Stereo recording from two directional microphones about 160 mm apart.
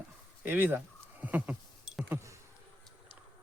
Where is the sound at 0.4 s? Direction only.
10° right (ahead or behind).